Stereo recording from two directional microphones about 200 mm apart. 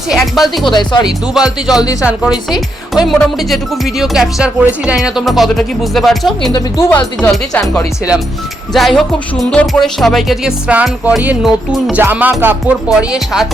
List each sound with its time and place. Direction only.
0.1 s music: centre (ahead or behind)
0.7 s speech: 20° left (ahead or behind)
1.3 s music: centre (ahead or behind)
1.8 s speech: 15° left (ahead or behind)
2.0 s music: 5° right (ahead or behind)
6.5 s speech: 15° left (ahead or behind)
8.7 s music: centre (ahead or behind)